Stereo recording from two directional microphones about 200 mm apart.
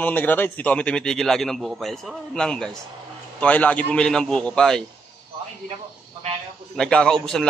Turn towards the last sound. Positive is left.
turn(degrees=5)  # may be behind; listen again after turning